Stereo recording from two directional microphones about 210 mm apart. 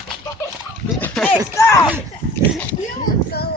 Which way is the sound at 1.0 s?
5° left (ahead or behind).